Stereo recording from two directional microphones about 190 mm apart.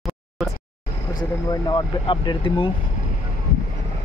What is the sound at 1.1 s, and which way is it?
Speech, 20° left (ahead or behind).